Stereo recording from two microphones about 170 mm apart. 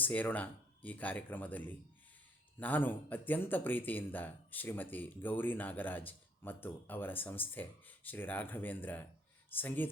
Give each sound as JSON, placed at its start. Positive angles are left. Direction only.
{"t": 0.0, "sound": "speech", "side_deg": 10}